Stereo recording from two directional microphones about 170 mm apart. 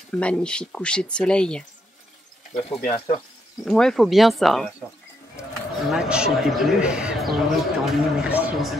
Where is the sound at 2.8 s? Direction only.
30° left (ahead or behind).